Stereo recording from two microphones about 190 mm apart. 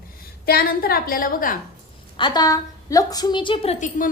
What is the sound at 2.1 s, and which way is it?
A woman's voice, 25° left (ahead or behind).